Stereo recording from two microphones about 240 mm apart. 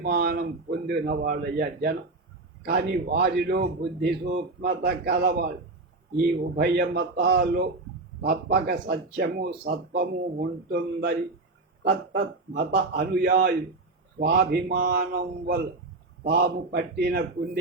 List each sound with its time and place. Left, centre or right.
0.0 s a man's voice: right
6.6 s a man's voice: right